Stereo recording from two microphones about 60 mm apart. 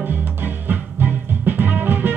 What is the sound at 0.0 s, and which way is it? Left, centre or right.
Music, right.